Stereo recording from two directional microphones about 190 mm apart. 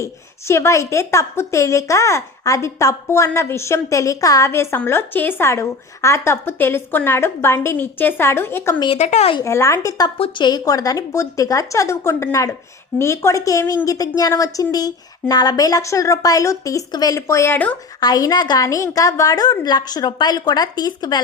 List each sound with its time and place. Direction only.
0.0 s a woman's voice: 15° left (ahead or behind)
8.8 s a woman's voice: 30° left (ahead or behind)
9.4 s a woman's voice: 15° left (ahead or behind)
18.0 s a woman's voice: 20° left (ahead or behind)